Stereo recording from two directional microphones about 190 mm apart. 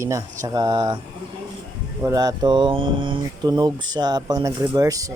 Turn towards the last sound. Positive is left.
turn(degrees=-20)  # may be behind; listen again after turning